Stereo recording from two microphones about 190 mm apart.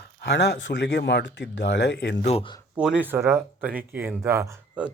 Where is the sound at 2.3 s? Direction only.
30° left (ahead or behind).